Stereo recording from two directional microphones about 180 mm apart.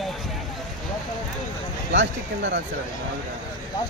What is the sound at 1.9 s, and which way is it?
Speech, 85° right.